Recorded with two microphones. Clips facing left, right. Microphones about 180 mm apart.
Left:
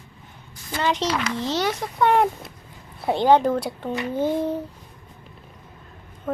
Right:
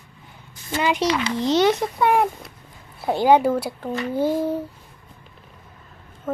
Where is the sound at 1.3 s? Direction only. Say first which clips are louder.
Right 6 dB; 15° right (ahead or behind).